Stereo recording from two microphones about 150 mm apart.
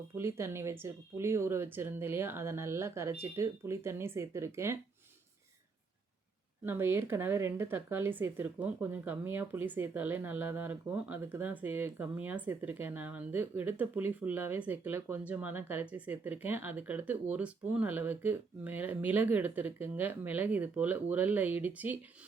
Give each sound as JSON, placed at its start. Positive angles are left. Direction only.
{"t": 0.2, "sound": "speech", "side_deg": -15}
{"t": 6.7, "sound": "speech", "side_deg": -15}